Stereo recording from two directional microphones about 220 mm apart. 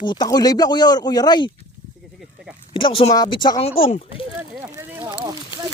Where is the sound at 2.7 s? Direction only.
25° left (ahead or behind).